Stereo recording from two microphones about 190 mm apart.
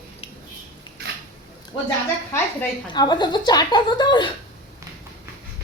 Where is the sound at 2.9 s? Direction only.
20° left (ahead or behind).